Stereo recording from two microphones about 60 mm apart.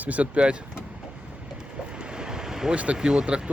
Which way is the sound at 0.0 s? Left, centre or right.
Right.